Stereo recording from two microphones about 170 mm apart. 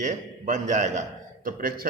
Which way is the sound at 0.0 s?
50° right (ahead or behind).